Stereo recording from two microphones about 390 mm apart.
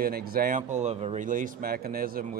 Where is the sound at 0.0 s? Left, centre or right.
Right.